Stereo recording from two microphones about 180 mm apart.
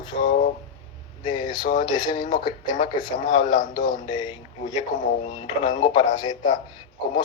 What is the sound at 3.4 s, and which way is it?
Speech, 50° left (ahead or behind).